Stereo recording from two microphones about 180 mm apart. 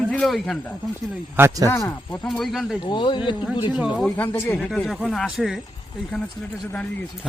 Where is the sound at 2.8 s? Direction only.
25° left (ahead or behind).